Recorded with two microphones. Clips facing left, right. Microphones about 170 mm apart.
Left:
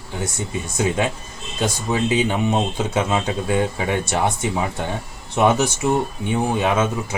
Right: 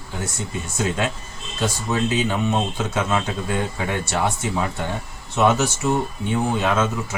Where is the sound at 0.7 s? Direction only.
15° left (ahead or behind).